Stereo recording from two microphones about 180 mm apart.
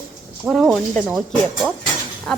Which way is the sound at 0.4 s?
Centre (ahead or behind).